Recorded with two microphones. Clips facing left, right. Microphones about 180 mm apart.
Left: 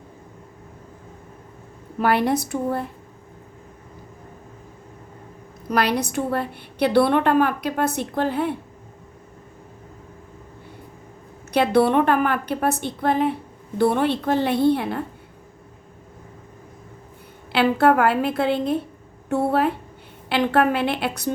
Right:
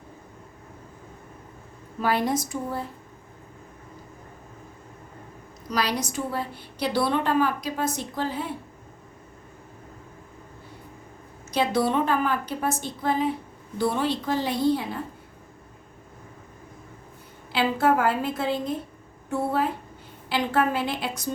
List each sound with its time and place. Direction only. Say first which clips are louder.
2.0 s a woman's voice: left 4 dB; 65° left (ahead or behind)
5.6 s a woman's voice: left 5 dB; 60° left (ahead or behind)
11.5 s a woman's voice: left 6 dB; 60° left (ahead or behind)
17.5 s a woman's voice: left 5 dB; 65° left (ahead or behind)